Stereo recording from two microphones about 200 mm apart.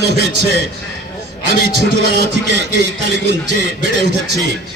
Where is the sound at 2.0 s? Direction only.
55° right (ahead or behind).